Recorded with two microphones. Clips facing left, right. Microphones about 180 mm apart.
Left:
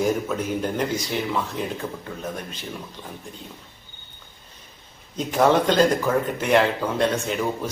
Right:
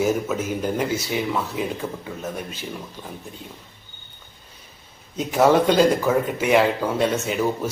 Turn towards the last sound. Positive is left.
turn(degrees=-5)  # may be behind; listen again after turning